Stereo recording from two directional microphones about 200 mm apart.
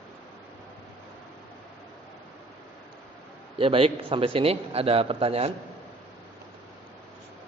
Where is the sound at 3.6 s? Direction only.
25° right (ahead or behind).